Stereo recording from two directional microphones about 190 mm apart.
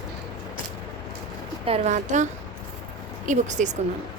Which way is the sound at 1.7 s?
35° right (ahead or behind).